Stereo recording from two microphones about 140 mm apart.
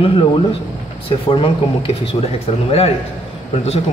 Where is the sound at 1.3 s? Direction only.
40° left (ahead or behind).